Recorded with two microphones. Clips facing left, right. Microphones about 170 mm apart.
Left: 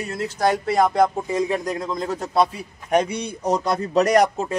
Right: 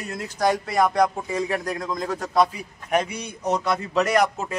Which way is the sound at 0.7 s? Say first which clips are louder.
Left 2 dB; 25° left (ahead or behind).